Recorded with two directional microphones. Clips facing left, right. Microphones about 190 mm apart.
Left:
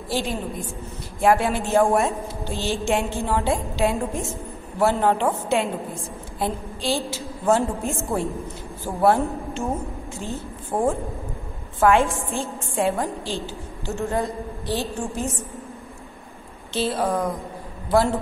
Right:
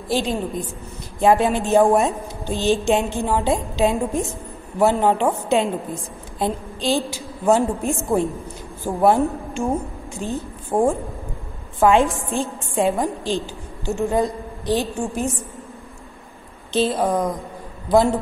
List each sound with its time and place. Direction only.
0.1 s a woman's voice: 20° right (ahead or behind)
16.7 s a woman's voice: 20° right (ahead or behind)